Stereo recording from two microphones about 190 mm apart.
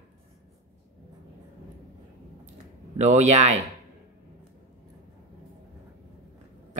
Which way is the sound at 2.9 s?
35° right (ahead or behind).